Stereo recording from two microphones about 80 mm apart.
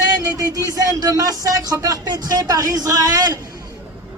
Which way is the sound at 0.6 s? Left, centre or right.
Right.